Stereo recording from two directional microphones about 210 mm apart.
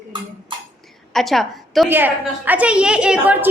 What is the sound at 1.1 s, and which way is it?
A woman's voice, centre (ahead or behind).